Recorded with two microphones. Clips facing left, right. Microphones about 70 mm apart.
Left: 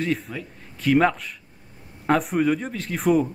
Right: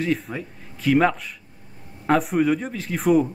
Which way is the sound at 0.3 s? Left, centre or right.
Right.